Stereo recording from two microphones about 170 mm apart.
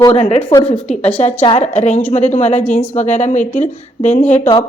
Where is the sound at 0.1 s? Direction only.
40° left (ahead or behind).